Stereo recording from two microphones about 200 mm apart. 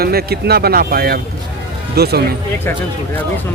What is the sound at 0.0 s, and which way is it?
Speech, 50° right (ahead or behind).